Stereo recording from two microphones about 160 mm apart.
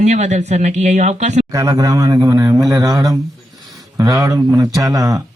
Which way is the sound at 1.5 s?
20° right (ahead or behind).